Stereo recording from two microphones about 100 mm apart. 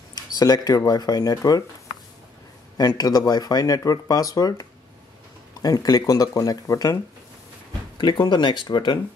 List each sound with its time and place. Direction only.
0.1 s speech: 40° left (ahead or behind)
2.8 s speech: 40° left (ahead or behind)
8.0 s speech: 50° left (ahead or behind)